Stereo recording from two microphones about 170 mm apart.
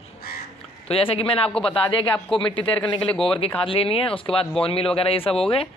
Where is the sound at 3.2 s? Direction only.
30° left (ahead or behind).